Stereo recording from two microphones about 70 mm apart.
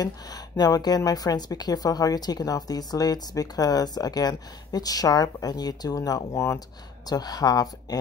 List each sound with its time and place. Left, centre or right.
0.0 s a woman's voice: left
6.3 s speech: left
7.1 s a woman's voice: left